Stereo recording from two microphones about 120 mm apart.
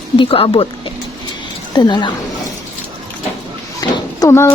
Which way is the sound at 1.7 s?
40° left (ahead or behind).